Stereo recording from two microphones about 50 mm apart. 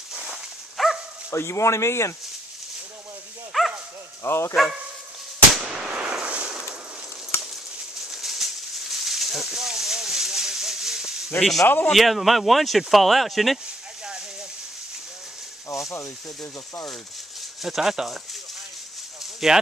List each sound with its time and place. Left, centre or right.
0.1 s dog: centre
0.8 s dog: centre
1.3 s speech: left
3.5 s dog: centre
4.2 s speech: left
5.6 s fireworks: centre
7.3 s a sound: left
8.1 s a sound: centre
11.3 s speech: centre
11.6 s speech: left
11.9 s speech: centre
17.6 s speech: centre
19.4 s speech: centre